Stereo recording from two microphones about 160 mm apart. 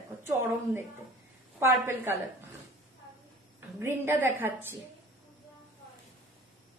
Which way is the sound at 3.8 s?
15° right (ahead or behind).